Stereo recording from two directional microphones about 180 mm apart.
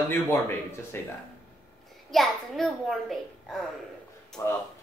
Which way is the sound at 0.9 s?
10° left (ahead or behind).